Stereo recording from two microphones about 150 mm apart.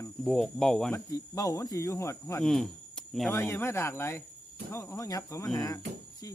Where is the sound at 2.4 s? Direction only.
5° left (ahead or behind).